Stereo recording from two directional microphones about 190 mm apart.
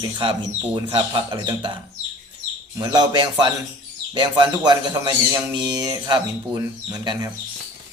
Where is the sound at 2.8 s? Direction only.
25° right (ahead or behind).